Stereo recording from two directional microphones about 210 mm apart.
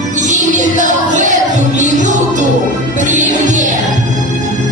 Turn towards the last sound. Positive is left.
turn(degrees=-35)  # may be behind; listen again after turning